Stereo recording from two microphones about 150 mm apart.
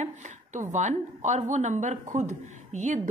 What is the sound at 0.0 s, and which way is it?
A woman's voice, 50° right (ahead or behind).